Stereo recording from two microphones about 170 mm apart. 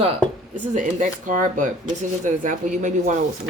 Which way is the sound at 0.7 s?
50° right (ahead or behind).